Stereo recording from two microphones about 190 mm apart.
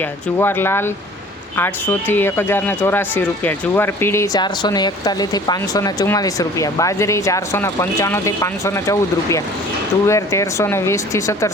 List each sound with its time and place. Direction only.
0.0 s speech: 10° left (ahead or behind)